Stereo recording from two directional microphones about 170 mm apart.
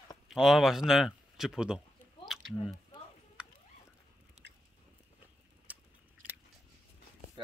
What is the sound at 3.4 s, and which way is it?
Fowl, 5° right (ahead or behind).